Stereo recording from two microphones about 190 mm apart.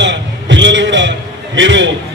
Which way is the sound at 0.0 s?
70° right (ahead or behind).